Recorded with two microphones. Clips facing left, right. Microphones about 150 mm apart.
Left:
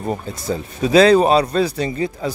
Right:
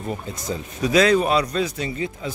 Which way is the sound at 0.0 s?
40° left (ahead or behind).